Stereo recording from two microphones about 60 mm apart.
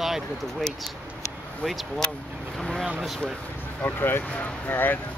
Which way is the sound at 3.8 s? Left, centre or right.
Left.